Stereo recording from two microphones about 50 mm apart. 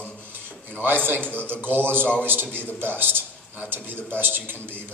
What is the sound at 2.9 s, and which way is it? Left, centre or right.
A man's voice, right.